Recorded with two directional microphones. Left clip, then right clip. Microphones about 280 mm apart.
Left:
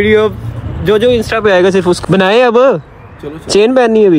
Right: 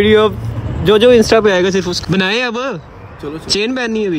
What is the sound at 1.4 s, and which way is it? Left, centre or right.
Speech, centre.